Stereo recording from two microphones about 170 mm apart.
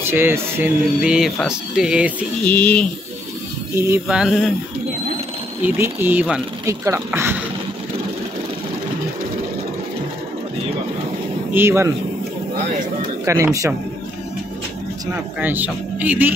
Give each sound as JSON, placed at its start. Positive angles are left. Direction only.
{"t": 0.0, "sound": "speech", "side_deg": -15}
{"t": 2.4, "sound": "speech", "side_deg": 10}
{"t": 3.7, "sound": "speech", "side_deg": -15}
{"t": 4.2, "sound": "speech", "side_deg": 0}
{"t": 5.6, "sound": "speech", "side_deg": -10}
{"t": 6.6, "sound": "speech", "side_deg": -20}
{"t": 11.5, "sound": "speech", "side_deg": -15}
{"t": 13.2, "sound": "speech", "side_deg": -15}
{"t": 15.4, "sound": "speech", "side_deg": -10}